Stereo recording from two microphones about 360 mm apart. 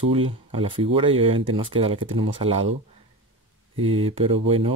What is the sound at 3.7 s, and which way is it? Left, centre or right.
Speech, centre.